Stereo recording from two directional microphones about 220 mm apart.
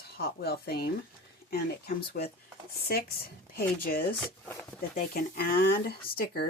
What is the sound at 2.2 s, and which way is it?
Speech, 40° left (ahead or behind).